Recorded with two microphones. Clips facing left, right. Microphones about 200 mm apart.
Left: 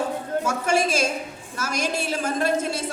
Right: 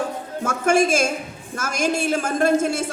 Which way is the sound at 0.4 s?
50° right (ahead or behind).